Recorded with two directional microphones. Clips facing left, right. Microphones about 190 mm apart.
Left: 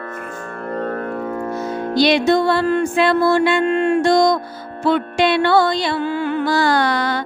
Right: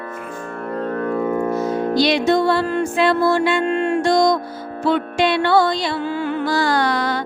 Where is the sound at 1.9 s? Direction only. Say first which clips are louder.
Left 3 dB; 60° left (ahead or behind).